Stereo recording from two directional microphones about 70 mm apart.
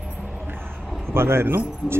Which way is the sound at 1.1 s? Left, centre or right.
Right.